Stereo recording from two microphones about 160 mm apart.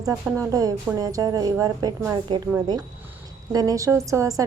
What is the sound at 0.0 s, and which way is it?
A woman's voice, 20° right (ahead or behind).